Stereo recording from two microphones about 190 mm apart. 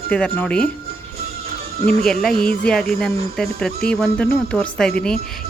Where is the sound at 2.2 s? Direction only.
5° left (ahead or behind).